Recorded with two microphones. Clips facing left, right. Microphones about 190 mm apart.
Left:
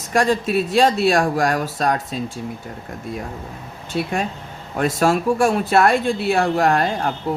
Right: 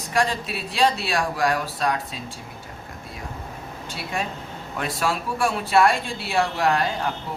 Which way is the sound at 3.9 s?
50° left (ahead or behind).